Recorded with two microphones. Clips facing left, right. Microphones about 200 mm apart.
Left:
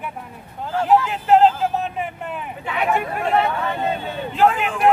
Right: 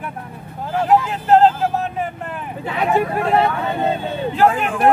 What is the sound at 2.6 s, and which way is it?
Vehicle, 35° right (ahead or behind).